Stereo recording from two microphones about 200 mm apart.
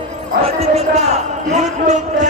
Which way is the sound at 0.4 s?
30° right (ahead or behind).